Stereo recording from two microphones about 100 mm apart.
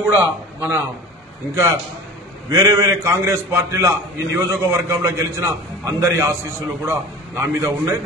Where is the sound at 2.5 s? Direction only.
30° right (ahead or behind).